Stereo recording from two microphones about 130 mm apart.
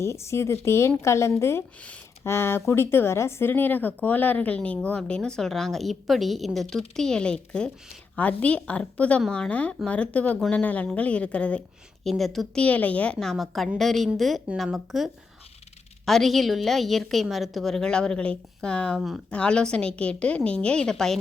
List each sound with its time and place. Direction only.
0.0 s a woman's voice: 20° left (ahead or behind); by 21.2 s 5° left (ahead or behind)